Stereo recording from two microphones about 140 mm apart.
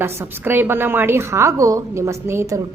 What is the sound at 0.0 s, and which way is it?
A woman's voice, 15° right (ahead or behind).